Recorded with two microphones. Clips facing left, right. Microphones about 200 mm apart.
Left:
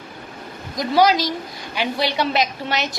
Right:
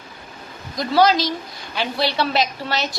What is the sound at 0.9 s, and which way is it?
A woman's voice, 15° left (ahead or behind).